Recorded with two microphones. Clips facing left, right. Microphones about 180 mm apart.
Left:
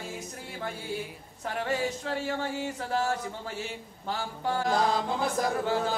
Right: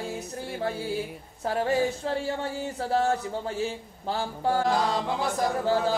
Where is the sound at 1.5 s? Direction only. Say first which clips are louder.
Right 5 dB; 35° right (ahead or behind).